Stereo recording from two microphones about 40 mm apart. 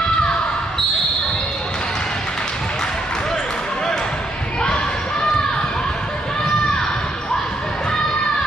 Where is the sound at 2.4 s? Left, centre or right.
Centre.